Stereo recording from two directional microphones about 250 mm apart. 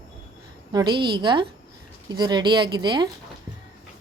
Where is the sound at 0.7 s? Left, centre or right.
Centre.